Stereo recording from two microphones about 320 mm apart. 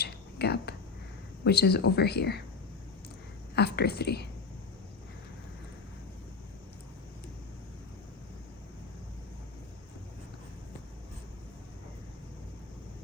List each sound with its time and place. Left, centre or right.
0.0 s a sound: left
1.5 s speech: left
3.5 s speech: left